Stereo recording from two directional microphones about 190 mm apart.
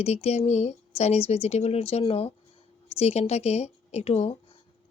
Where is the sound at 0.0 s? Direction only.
35° left (ahead or behind).